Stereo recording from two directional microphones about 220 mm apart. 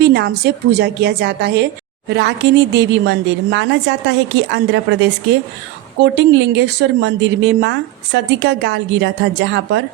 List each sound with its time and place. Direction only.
0.0 s speech: 50° right (ahead or behind)